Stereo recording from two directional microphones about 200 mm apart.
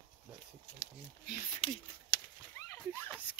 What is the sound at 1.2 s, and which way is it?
Speech, 50° left (ahead or behind).